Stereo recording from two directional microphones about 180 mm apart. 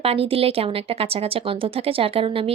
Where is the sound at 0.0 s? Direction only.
30° right (ahead or behind).